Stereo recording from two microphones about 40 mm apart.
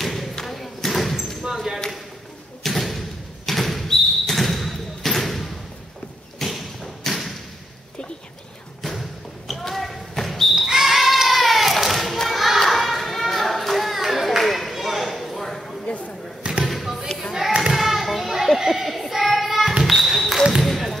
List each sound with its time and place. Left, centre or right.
0.0 s a sound: centre
0.4 s thump: centre
1.4 s basketball bounce: centre
2.6 s thump: centre
9.5 s basketball bounce: centre
10.5 s basketball bounce: centre
12.2 s a sound: centre
16.6 s basketball bounce: centre
17.6 s children playing: centre
19.8 s basketball bounce: centre